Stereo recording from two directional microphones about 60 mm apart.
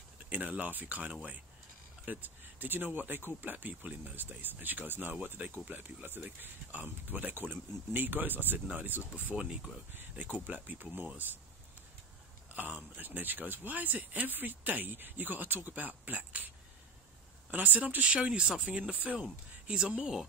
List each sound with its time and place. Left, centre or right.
0.3 s speech: right
12.5 s a sound: right
12.9 s speech: right; by 20.2 s centre